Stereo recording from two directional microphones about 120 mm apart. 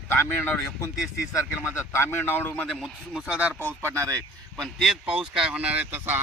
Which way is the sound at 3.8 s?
25° right (ahead or behind).